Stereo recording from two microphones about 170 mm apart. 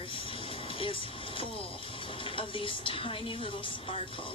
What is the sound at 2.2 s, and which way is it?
A woman's voice, 30° left (ahead or behind).